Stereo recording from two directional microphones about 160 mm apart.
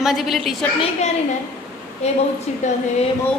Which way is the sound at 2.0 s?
40° left (ahead or behind).